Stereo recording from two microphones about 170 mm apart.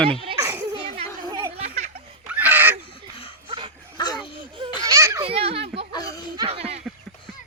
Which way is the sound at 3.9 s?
25° left (ahead or behind).